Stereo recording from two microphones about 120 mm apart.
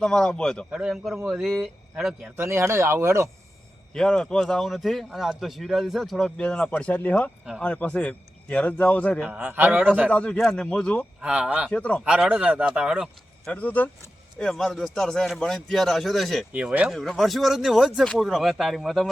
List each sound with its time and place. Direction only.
0.0 s a man's voice: 5° left (ahead or behind)
0.7 s a man's voice: 5° right (ahead or behind)
2.3 s speech: 20° right (ahead or behind)
3.9 s a man's voice: 5° left (ahead or behind)
9.2 s a man's voice: 10° right (ahead or behind)
10.1 s a man's voice: 10° left (ahead or behind)
11.2 s a man's voice: 10° right (ahead or behind)
11.7 s a man's voice: 10° left (ahead or behind)
12.0 s a man's voice: 10° right (ahead or behind)
13.5 s a man's voice: 15° left (ahead or behind)
16.5 s a man's voice: 10° right (ahead or behind)
16.9 s a man's voice: centre (ahead or behind)